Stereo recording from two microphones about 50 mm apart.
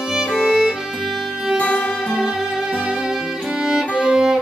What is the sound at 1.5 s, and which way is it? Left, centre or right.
Music, left.